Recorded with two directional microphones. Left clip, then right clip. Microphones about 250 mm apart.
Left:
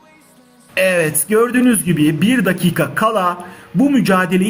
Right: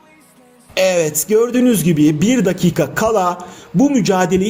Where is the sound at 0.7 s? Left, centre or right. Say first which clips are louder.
Even; right.